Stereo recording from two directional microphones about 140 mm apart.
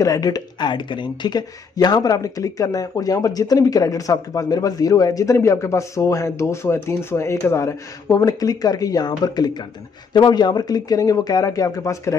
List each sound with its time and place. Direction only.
0.0 s speech: 25° left (ahead or behind)